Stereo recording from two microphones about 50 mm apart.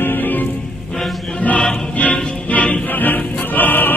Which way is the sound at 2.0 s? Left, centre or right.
Left.